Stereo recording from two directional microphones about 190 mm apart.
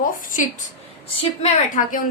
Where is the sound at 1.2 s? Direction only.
35° left (ahead or behind).